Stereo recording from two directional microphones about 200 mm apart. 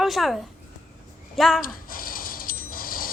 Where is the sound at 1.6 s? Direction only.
45° left (ahead or behind).